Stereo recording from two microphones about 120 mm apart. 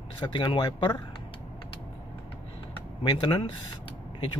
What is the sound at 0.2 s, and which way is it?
Speech, 40° left (ahead or behind).